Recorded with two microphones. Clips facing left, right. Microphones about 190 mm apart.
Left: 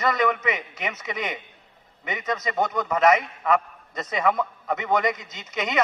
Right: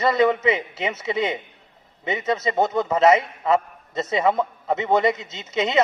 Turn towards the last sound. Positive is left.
turn(degrees=-25)  # may be behind; listen again after turning